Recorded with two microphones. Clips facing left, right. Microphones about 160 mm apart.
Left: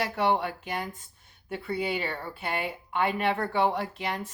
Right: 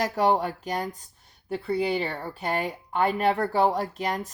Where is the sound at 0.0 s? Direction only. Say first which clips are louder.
Right 3 dB; 40° right (ahead or behind).